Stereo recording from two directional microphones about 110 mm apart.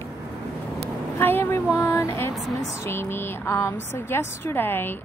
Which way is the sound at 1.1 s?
20° left (ahead or behind).